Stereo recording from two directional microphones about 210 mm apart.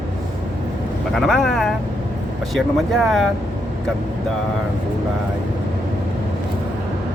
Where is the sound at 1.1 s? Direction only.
Centre (ahead or behind).